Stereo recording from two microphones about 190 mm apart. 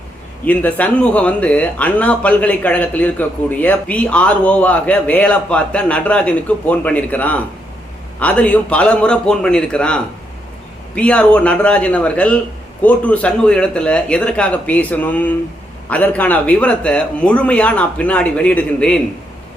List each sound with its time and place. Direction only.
0.4 s a man's voice: 10° left (ahead or behind)